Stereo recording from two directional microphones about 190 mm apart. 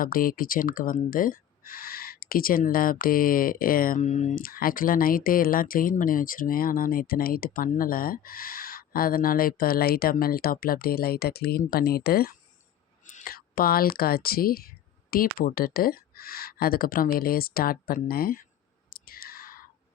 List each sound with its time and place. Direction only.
0.0 s speech: 50° left (ahead or behind)
18.9 s clicking: 50° left (ahead or behind)